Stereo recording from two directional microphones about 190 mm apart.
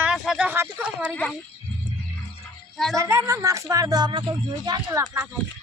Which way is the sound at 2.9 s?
15° right (ahead or behind).